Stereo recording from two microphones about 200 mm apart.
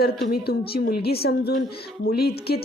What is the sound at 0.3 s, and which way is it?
A woman's voice, 50° left (ahead or behind).